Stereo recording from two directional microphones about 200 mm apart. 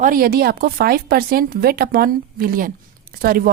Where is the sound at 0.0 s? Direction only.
45° right (ahead or behind).